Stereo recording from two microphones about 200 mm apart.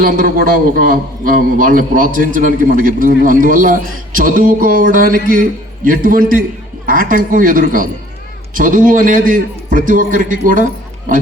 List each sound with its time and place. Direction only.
0.0 s a man's voice: 45° right (ahead or behind)